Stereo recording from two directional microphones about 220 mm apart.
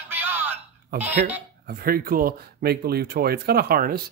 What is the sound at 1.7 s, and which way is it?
Speech, 40° right (ahead or behind).